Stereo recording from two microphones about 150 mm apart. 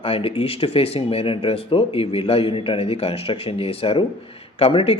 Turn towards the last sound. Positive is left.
turn(degrees=40)  # may be behind; listen again after turning